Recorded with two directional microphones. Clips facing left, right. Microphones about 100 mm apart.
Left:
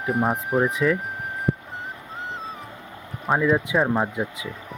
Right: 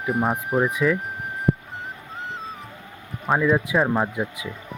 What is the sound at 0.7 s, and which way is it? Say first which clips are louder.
Speech: even; 30° left (ahead or behind).